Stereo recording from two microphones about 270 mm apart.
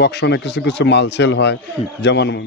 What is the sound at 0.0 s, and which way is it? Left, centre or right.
Speech, left.